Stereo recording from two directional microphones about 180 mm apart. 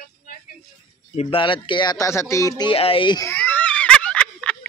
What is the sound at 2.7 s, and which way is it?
Speech, 30° left (ahead or behind).